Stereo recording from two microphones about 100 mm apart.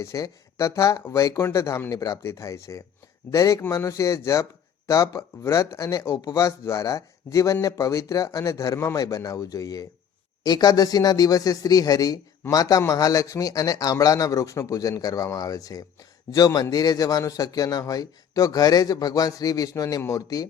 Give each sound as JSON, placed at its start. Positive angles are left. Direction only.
{"t": 0.0, "sound": "speech", "side_deg": 35}